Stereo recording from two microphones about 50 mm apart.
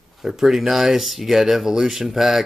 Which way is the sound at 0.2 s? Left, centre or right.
Centre.